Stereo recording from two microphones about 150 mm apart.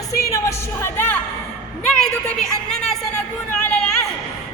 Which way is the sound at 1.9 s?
5° left (ahead or behind).